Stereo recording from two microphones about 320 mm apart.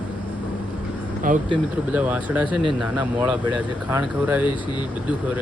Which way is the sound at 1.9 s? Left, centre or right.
Centre.